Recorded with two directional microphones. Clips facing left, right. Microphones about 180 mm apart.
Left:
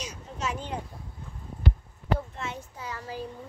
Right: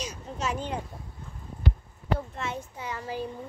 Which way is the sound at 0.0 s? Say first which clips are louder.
Right 2 dB; 40° right (ahead or behind).